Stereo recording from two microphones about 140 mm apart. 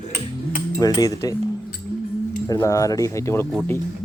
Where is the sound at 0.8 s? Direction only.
25° left (ahead or behind).